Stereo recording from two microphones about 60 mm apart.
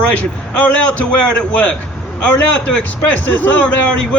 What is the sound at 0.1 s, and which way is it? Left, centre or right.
A man's voice, left.